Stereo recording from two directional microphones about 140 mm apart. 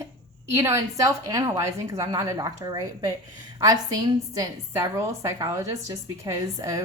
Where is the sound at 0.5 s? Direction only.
20° right (ahead or behind).